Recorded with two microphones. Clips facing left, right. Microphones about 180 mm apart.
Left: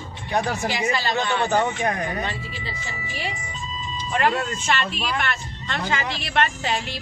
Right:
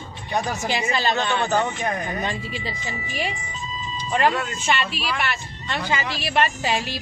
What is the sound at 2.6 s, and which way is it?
Speech, 15° right (ahead or behind).